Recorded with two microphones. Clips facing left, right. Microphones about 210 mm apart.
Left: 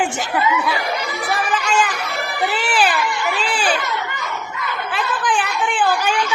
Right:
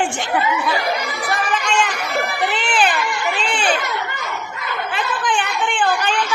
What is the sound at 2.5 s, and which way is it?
Baby cry, 5° left (ahead or behind).